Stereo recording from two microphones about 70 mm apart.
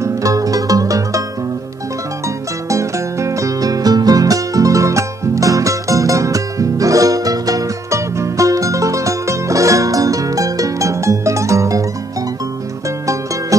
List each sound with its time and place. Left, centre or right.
0.0 s music: right
2.2 s music: right
13.0 s music: right